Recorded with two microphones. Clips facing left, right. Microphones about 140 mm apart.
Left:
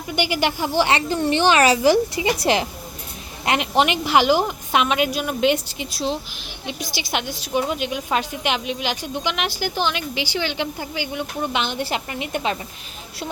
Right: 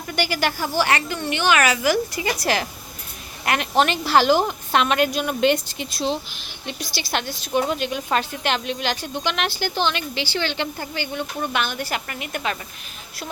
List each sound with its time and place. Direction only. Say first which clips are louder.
0.1 s a woman's voice: left 2 dB; 20° left (ahead or behind)